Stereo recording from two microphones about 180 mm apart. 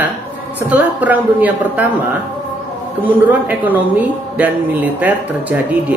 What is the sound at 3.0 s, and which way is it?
A man's voice, 10° right (ahead or behind).